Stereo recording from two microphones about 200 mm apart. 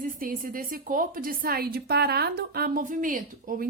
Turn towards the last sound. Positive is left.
turn(degrees=-45)  # may be behind; listen again after turning